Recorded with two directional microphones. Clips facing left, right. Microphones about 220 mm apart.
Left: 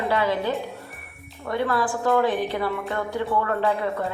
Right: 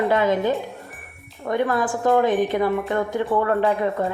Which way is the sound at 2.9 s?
20° right (ahead or behind).